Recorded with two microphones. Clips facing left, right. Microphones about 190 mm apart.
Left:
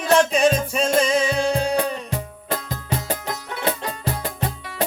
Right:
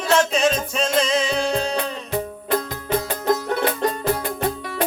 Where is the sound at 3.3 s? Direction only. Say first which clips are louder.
Right 9 dB; 45° right (ahead or behind).